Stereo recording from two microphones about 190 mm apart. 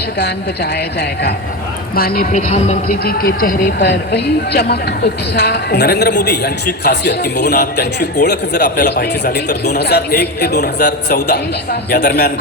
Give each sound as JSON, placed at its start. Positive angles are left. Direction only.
{"t": 0.2, "sound": "a man's voice", "side_deg": 60}
{"t": 3.8, "sound": "a man's voice", "side_deg": 65}